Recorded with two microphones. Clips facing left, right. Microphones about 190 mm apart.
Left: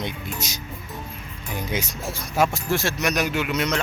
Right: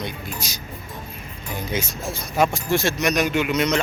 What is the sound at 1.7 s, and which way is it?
Speech, 15° left (ahead or behind).